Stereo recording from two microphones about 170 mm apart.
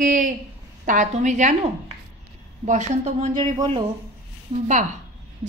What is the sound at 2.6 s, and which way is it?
Speech, 45° right (ahead or behind).